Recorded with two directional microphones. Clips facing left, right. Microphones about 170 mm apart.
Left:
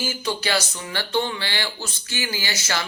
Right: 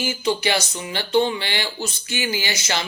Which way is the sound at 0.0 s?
20° right (ahead or behind).